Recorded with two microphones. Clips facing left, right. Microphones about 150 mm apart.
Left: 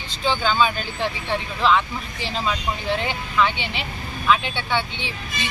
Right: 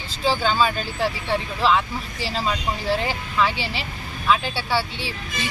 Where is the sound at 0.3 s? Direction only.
5° right (ahead or behind).